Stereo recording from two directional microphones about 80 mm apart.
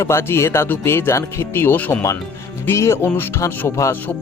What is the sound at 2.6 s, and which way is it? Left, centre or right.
Speech, left.